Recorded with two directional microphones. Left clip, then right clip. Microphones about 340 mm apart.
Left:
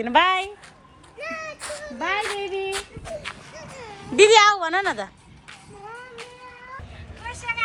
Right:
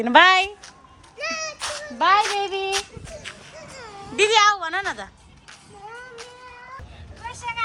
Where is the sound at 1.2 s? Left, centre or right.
Centre.